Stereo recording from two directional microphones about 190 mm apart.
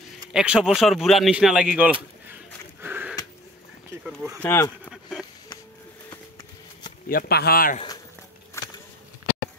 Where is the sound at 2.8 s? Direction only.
10° right (ahead or behind).